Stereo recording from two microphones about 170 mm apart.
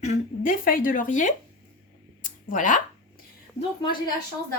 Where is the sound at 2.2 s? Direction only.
50° left (ahead or behind).